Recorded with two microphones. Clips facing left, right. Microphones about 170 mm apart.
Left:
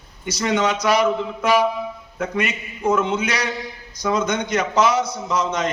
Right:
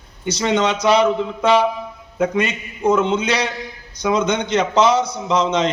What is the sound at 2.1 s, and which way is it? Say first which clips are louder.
A man's voice: right 5 dB; 15° right (ahead or behind).